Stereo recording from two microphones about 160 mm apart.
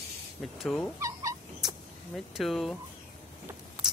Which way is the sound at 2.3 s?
Centre (ahead or behind).